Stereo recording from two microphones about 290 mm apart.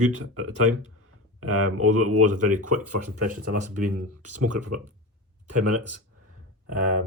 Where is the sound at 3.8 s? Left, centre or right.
Right.